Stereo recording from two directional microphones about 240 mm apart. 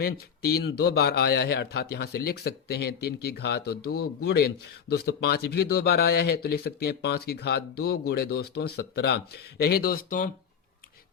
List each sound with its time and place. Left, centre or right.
0.0 s speech: left